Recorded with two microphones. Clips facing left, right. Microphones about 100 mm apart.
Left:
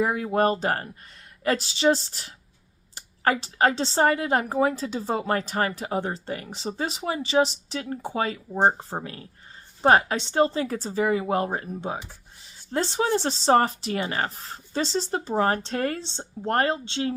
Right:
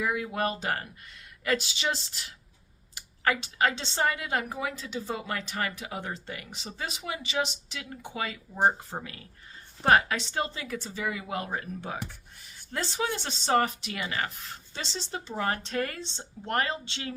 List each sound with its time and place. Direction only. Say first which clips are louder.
0.0 s a woman's voice: left 7 dB; 40° left (ahead or behind)